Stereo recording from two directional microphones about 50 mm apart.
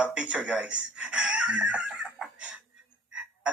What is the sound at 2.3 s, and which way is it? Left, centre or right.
Music, right.